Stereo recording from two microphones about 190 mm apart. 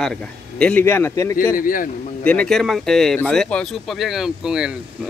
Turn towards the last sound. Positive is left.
turn(degrees=-5)  # may be behind; listen again after turning